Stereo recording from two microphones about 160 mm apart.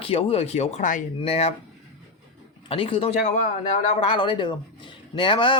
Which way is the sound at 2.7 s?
35° left (ahead or behind).